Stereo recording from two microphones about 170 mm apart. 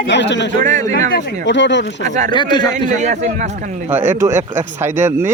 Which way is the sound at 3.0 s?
45° right (ahead or behind).